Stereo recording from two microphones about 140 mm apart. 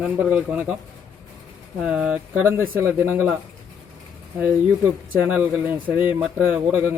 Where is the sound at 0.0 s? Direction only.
10° right (ahead or behind).